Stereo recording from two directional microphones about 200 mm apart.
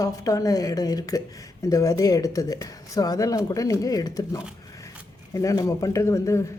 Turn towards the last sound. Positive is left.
turn(degrees=15)  # may be behind; listen again after turning